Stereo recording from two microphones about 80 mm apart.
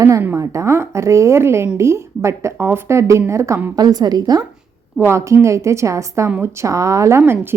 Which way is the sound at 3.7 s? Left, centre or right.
Right.